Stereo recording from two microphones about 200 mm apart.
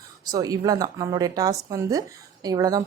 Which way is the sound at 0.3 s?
20° right (ahead or behind).